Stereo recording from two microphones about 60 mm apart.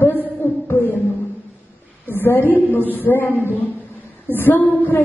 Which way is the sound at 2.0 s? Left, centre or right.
Left.